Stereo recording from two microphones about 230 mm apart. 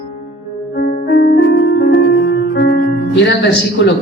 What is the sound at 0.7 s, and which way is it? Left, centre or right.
Music, left.